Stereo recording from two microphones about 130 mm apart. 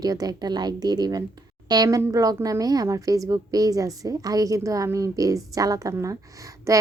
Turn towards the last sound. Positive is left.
turn(degrees=-25)  # may be behind; listen again after turning